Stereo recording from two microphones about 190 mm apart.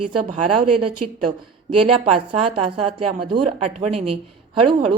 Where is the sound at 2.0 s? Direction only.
30° right (ahead or behind).